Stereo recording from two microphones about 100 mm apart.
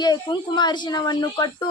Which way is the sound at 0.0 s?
45° left (ahead or behind).